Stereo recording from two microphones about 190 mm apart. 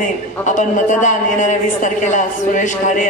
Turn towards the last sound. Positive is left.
turn(degrees=40)  # may be behind; listen again after turning